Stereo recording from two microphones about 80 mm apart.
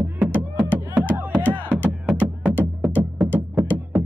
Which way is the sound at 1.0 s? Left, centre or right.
Right.